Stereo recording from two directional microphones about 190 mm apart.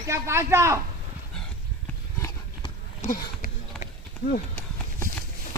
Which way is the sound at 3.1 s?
45° left (ahead or behind).